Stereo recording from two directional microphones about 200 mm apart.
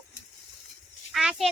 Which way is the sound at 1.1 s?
Centre (ahead or behind).